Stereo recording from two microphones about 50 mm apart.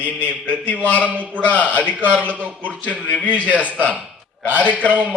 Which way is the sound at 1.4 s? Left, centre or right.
Left.